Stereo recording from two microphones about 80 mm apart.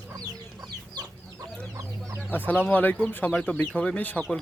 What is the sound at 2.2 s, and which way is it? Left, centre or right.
Speech, left.